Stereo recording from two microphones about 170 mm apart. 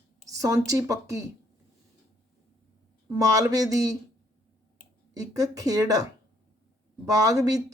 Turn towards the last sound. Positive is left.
turn(degrees=-20)  # may be behind; listen again after turning